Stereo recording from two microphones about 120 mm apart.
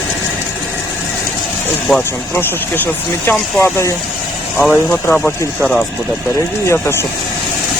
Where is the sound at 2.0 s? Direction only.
20° left (ahead or behind).